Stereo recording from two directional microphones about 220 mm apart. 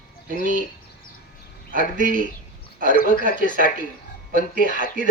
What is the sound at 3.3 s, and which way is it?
Speech, 40° right (ahead or behind).